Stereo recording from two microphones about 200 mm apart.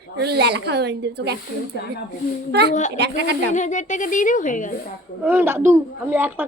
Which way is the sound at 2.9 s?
55° right (ahead or behind).